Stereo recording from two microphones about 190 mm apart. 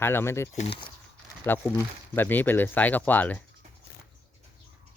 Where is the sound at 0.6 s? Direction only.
25° left (ahead or behind).